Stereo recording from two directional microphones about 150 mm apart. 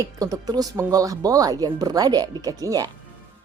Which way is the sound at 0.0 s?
25° right (ahead or behind).